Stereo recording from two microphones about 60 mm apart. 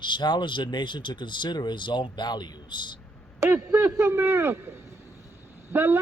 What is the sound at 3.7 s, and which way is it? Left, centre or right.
A man's voice, right.